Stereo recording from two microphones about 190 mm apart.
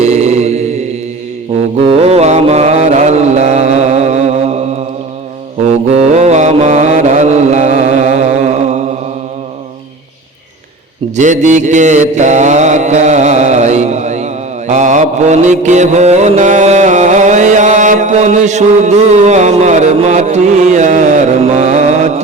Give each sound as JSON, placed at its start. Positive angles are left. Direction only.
{"t": 0.0, "sound": "mantra", "side_deg": -35}
{"t": 5.6, "sound": "mantra", "side_deg": -35}
{"t": 11.2, "sound": "mantra", "side_deg": -40}